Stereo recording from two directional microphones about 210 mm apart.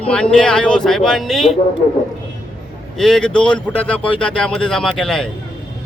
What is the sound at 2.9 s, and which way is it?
A man's voice, centre (ahead or behind).